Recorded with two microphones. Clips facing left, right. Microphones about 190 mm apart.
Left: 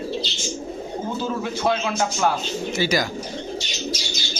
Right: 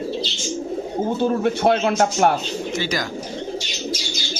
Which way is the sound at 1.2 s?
60° right (ahead or behind).